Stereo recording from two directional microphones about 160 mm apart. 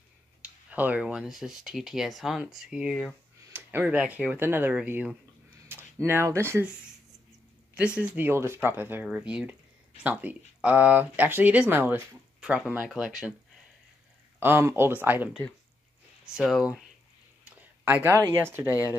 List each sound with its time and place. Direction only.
0.4 s speech: 10° right (ahead or behind)
8.0 s speech: 15° right (ahead or behind)
14.4 s speech: 15° right (ahead or behind)
16.3 s speech: centre (ahead or behind)